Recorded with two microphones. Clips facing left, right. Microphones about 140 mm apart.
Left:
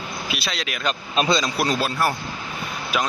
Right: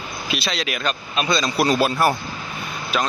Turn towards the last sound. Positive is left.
turn(degrees=10)  # may be behind; listen again after turning